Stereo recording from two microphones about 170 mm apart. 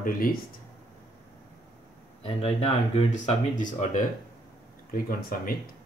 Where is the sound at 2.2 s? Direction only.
35° left (ahead or behind); by 5.7 s 60° left (ahead or behind).